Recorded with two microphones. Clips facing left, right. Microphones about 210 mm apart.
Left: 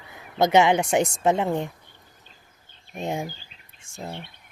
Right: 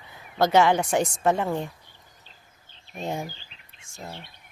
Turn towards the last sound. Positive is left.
turn(degrees=30)  # may be behind; listen again after turning